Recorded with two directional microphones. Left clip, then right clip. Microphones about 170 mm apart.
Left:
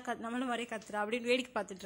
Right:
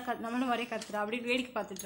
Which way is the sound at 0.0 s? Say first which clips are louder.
Right 3 dB; 35° left (ahead or behind).